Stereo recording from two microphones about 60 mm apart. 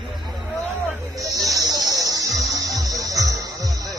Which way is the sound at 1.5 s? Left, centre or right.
Right.